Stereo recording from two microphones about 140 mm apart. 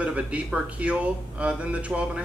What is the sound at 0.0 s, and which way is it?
A man's voice, 10° right (ahead or behind).